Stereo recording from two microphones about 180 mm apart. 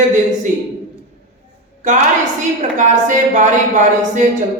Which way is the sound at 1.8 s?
45° right (ahead or behind).